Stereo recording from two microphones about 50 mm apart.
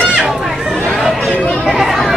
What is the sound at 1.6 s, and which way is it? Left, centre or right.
Chatter, centre.